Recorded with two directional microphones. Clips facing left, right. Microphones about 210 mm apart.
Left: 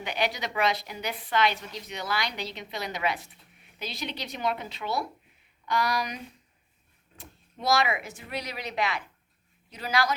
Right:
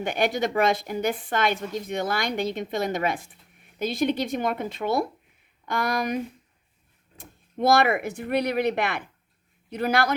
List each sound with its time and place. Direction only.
0.0 s a woman's voice: 50° right (ahead or behind)